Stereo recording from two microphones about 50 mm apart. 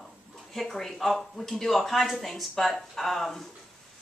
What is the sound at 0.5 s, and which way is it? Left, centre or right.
Speech, centre.